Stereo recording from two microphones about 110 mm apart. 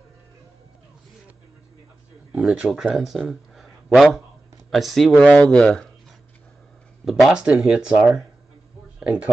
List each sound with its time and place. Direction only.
2.3 s speech: 5° right (ahead or behind)
7.1 s speech: centre (ahead or behind)